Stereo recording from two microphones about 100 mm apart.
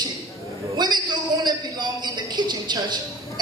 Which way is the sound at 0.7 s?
45° right (ahead or behind).